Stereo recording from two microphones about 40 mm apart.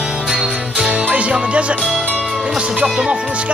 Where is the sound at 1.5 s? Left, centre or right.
Right.